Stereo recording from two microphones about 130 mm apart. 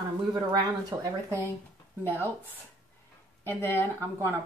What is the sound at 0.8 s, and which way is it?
Speech, 30° right (ahead or behind).